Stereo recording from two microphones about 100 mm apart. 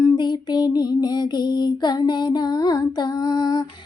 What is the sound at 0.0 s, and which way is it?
Music, 45° left (ahead or behind).